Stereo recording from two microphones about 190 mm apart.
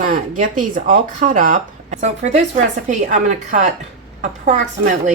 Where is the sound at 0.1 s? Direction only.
40° right (ahead or behind).